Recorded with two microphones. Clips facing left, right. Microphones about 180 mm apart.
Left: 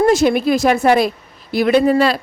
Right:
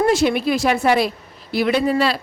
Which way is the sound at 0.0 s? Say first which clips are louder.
Left 4 dB; 45° left (ahead or behind).